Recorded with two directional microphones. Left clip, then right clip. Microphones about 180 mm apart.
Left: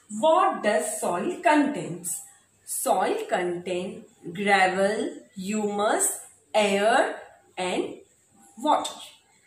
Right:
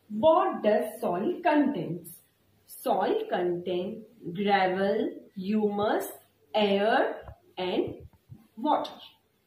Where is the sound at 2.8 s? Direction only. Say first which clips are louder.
Left 3 dB; 30° left (ahead or behind).